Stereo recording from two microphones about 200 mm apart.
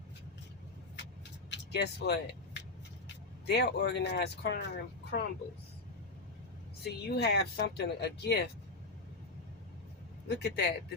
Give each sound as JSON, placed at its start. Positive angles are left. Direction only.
{"t": 1.5, "sound": "vehicle", "side_deg": 60}
{"t": 3.4, "sound": "speech", "side_deg": 55}
{"t": 6.8, "sound": "speech", "side_deg": 55}
{"t": 10.2, "sound": "speech", "side_deg": 55}